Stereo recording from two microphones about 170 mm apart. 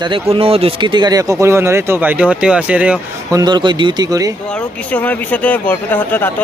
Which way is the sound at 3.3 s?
25° right (ahead or behind).